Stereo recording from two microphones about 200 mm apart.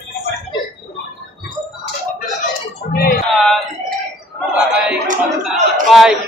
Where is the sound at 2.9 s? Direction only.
50° left (ahead or behind).